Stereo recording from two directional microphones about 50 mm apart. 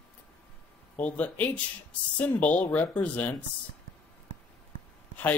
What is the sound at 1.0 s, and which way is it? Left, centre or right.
Speech, left.